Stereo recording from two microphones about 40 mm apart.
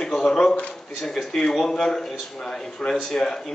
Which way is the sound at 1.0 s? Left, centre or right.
Centre.